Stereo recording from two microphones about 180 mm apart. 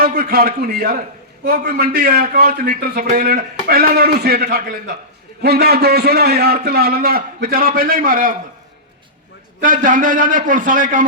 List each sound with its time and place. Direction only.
0.0 s a man's voice: 55° right (ahead or behind)
9.6 s a man's voice: 50° right (ahead or behind)